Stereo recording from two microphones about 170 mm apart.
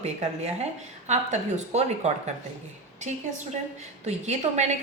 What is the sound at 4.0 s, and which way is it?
Speech, 40° right (ahead or behind).